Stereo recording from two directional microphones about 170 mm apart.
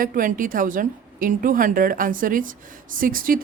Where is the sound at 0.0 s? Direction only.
55° right (ahead or behind).